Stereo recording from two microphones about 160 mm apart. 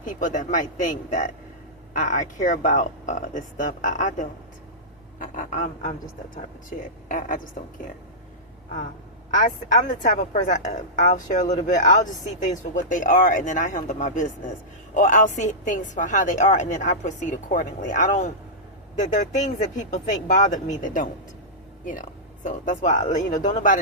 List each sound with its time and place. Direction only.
0.0 s a woman's voice: 55° left (ahead or behind)
9.3 s a woman's voice: 50° left (ahead or behind)
22.4 s a woman's voice: 50° left (ahead or behind)